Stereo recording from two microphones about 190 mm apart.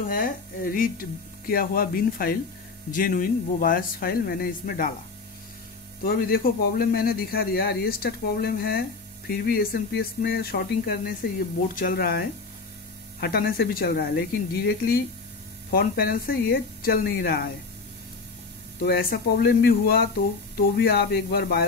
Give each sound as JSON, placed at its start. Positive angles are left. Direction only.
{"t": 0.1, "sound": "speech", "side_deg": 50}
{"t": 6.0, "sound": "speech", "side_deg": 50}
{"t": 18.9, "sound": "speech", "side_deg": 55}